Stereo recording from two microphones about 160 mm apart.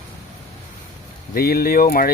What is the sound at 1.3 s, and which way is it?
Speech, 70° left (ahead or behind).